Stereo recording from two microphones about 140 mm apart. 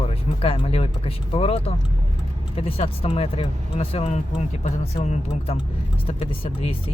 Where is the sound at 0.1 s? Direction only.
45° left (ahead or behind).